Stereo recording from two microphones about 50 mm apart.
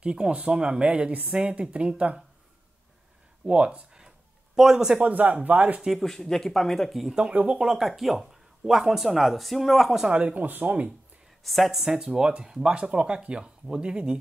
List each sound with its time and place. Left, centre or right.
0.0 s speech: centre
3.4 s speech: right
4.6 s speech: centre
5.0 s speech: right
5.9 s speech: centre
7.2 s speech: right
7.8 s speech: centre
10.1 s speech: right
11.4 s speech: centre